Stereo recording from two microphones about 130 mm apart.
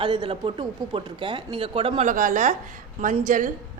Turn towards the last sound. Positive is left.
turn(degrees=-90)